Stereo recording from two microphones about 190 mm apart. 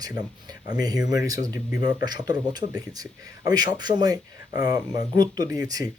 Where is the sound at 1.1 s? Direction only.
20° right (ahead or behind).